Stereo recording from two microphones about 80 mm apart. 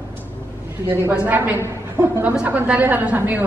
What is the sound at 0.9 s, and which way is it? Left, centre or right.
A woman's voice, right.